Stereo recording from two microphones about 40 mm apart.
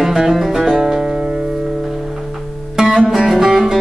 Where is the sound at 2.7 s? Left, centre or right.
Centre.